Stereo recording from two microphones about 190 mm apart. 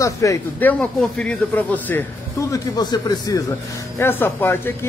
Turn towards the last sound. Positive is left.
turn(degrees=10)  # may be behind; listen again after turning